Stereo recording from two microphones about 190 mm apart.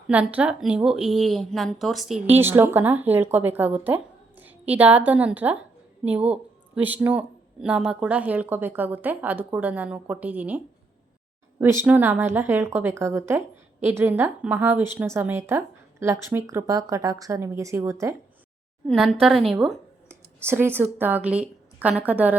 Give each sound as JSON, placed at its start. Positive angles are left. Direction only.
{"t": 0.1, "sound": "a woman's voice", "side_deg": -5}
{"t": 2.3, "sound": "speech", "side_deg": -10}
{"t": 11.6, "sound": "speech", "side_deg": -10}
{"t": 19.2, "sound": "speech", "side_deg": 0}
{"t": 20.4, "sound": "speech", "side_deg": -10}